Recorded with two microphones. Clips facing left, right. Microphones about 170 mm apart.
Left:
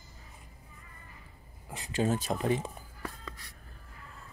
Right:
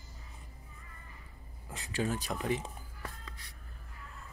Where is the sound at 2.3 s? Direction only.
40° left (ahead or behind).